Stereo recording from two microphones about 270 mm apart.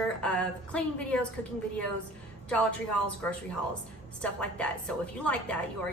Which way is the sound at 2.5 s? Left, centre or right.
Centre.